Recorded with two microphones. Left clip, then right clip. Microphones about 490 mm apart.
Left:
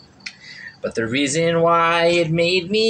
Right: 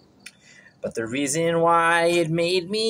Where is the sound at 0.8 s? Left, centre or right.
Right.